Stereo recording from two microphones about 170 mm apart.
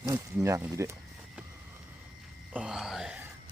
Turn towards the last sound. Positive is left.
turn(degrees=-5)  # may be behind; listen again after turning